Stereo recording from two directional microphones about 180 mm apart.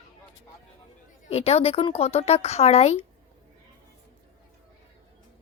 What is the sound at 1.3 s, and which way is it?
Speech, 35° left (ahead or behind).